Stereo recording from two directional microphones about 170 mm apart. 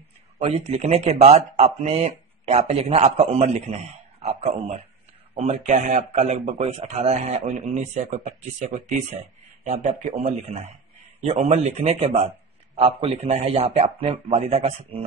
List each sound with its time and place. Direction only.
0.4 s speech: 35° right (ahead or behind)